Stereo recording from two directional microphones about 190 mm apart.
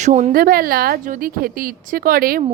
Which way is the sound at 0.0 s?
40° right (ahead or behind).